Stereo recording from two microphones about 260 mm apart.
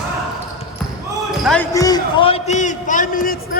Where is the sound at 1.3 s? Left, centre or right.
Centre.